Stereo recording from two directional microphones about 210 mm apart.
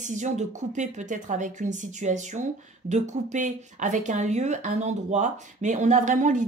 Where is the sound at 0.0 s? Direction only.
35° right (ahead or behind).